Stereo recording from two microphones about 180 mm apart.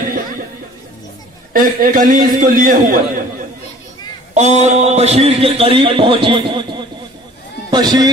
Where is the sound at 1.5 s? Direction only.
50° right (ahead or behind).